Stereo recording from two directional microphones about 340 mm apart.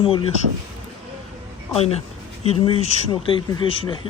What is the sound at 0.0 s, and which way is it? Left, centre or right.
Speech, centre.